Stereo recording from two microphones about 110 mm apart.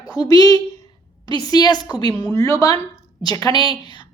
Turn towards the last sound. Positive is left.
turn(degrees=35)  # may be behind; listen again after turning